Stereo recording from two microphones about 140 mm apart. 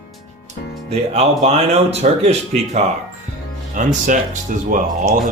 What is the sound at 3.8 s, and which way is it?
Speech, 75° right (ahead or behind).